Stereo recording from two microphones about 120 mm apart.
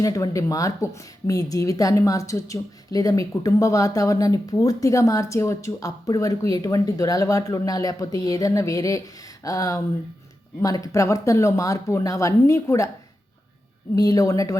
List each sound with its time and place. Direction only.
0.0 s speech: 30° left (ahead or behind)
13.9 s speech: 30° left (ahead or behind)